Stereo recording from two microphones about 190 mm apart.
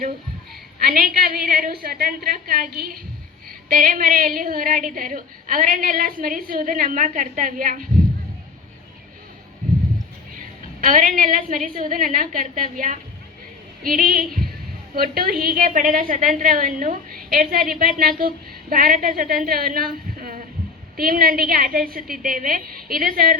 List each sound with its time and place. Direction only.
0.8 s a woman's voice: 50° right (ahead or behind)
10.3 s a woman's voice: 45° right (ahead or behind)